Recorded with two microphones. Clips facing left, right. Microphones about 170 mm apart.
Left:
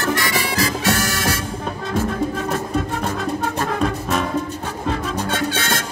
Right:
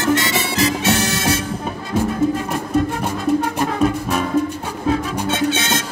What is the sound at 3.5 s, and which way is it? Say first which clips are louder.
Music: right 3 dB; 5° right (ahead or behind).